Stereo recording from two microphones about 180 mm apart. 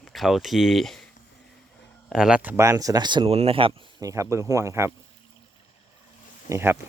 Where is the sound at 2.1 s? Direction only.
5° right (ahead or behind).